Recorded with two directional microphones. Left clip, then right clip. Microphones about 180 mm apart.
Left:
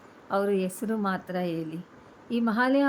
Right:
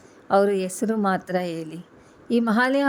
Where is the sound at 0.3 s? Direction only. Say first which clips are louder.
Right 7 dB; 35° right (ahead or behind).